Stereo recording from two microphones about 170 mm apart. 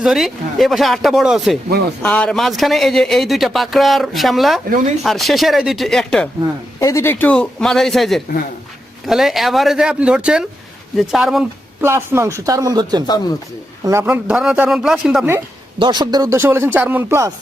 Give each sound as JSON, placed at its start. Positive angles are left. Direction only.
{"t": 0.0, "sound": "speech", "side_deg": 0}
{"t": 6.7, "sound": "speech", "side_deg": 15}
{"t": 11.8, "sound": "speech", "side_deg": -15}
{"t": 15.8, "sound": "speech", "side_deg": -25}